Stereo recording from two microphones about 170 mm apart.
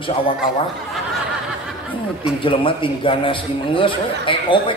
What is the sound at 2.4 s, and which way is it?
A man's voice, 30° left (ahead or behind).